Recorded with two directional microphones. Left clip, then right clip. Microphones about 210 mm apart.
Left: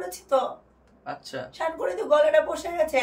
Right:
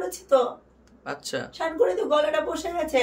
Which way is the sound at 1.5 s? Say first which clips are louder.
Right 4 dB; 10° right (ahead or behind).